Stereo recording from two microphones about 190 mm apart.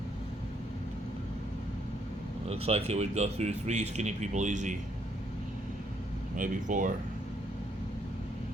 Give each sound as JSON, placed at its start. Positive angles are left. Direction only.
{"t": 2.5, "sound": "speech", "side_deg": -35}
{"t": 6.3, "sound": "speech", "side_deg": -45}